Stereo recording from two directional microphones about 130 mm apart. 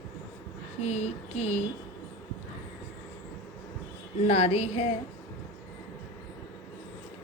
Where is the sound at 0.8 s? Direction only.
60° left (ahead or behind).